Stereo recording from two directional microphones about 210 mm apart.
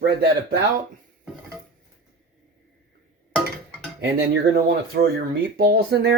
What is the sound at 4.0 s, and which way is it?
Speech, 50° right (ahead or behind).